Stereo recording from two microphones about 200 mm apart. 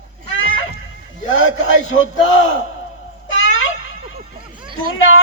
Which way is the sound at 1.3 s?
75° left (ahead or behind).